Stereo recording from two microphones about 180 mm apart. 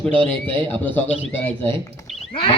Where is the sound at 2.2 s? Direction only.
30° left (ahead or behind).